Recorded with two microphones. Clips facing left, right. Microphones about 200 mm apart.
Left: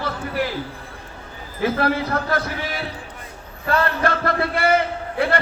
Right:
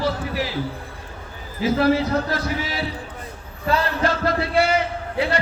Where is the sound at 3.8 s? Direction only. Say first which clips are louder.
Left 2 dB; 55° left (ahead or behind).